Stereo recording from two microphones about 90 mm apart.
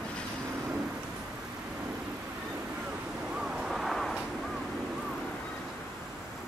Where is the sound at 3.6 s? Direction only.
Centre (ahead or behind).